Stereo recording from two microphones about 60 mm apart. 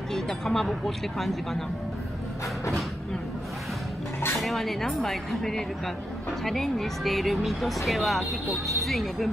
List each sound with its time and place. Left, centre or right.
0.1 s speech: centre
4.4 s speech: centre